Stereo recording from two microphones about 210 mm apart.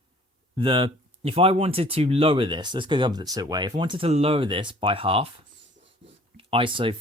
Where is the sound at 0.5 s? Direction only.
25° right (ahead or behind).